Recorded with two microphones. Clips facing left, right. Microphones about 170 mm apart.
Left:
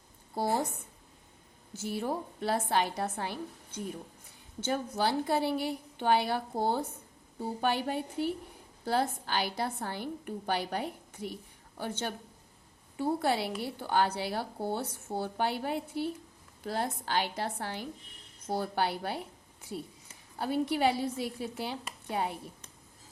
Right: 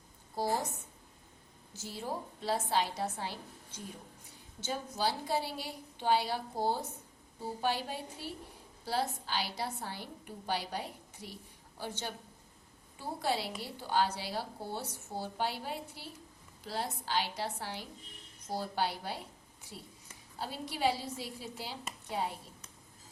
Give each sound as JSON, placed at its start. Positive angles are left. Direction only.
{"t": 1.8, "sound": "a woman's voice", "side_deg": 60}
{"t": 20.4, "sound": "a woman's voice", "side_deg": 60}